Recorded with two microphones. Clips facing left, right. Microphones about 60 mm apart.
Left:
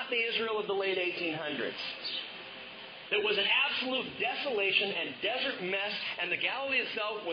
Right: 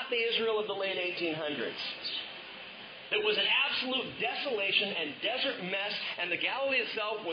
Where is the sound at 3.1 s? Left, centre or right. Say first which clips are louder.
Even; centre.